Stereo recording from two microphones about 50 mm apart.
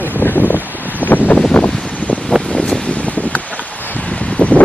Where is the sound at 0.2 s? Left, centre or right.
Left.